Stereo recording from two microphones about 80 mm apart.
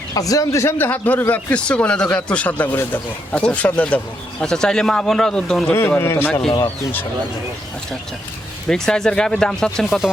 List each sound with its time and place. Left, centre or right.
0.1 s speech: left
0.9 s speech: left; by 5.6 s centre
5.6 s speech: left
8.7 s speech: centre